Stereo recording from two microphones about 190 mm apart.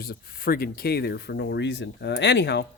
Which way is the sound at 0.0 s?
50° left (ahead or behind).